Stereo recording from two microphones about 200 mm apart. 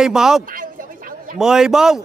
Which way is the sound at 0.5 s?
45° right (ahead or behind).